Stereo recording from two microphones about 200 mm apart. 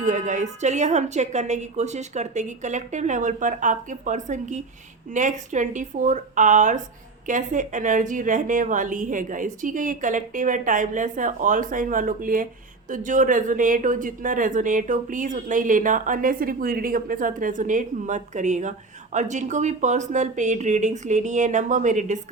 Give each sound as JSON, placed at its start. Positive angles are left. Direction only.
{"t": 0.0, "sound": "speech", "side_deg": -40}